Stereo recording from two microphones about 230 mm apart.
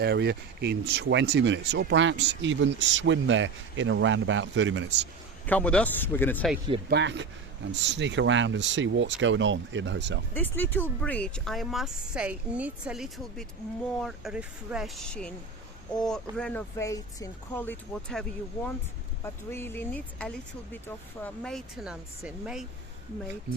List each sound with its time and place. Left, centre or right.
0.0 s speech: right
5.5 s speech: centre
6.9 s speech: right
10.3 s speech: centre